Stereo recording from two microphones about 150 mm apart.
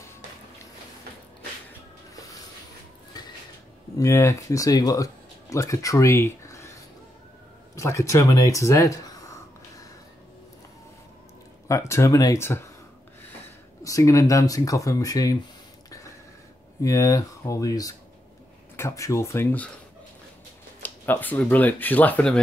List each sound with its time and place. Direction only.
4.0 s speech: 20° left (ahead or behind)
7.7 s a sound: 20° left (ahead or behind)
11.6 s speech: 20° left (ahead or behind)
13.8 s speech: 20° left (ahead or behind)
16.8 s speech: 20° left (ahead or behind)
20.8 s speech: 10° left (ahead or behind)